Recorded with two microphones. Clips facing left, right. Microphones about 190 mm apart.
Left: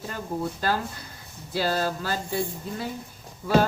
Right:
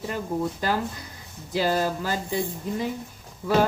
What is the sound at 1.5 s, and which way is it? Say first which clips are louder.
Speech: right 2 dB; 15° right (ahead or behind).